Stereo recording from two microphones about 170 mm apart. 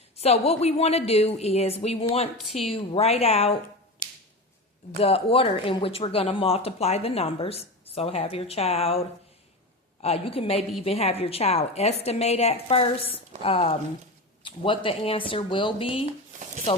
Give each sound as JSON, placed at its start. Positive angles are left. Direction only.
{"t": 0.2, "sound": "speech", "side_deg": 35}
{"t": 2.4, "sound": "a woman's voice", "side_deg": 0}
{"t": 2.6, "sound": "speech", "side_deg": 35}
{"t": 4.9, "sound": "speech", "side_deg": 35}